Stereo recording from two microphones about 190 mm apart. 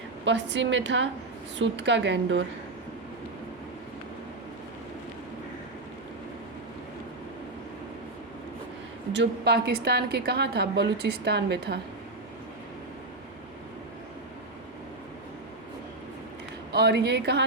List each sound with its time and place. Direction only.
0.3 s a woman's voice: 70° right (ahead or behind)
9.1 s a woman's voice: 60° right (ahead or behind)
16.7 s a woman's voice: 60° right (ahead or behind)